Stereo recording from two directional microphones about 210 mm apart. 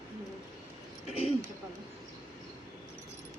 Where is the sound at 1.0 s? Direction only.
30° left (ahead or behind).